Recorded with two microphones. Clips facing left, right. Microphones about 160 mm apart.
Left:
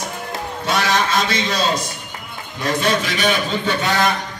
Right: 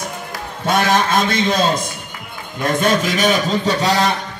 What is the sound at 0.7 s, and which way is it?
Speech, 50° right (ahead or behind).